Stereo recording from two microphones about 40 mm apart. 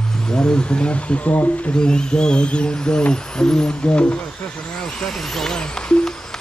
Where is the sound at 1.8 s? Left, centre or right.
Left.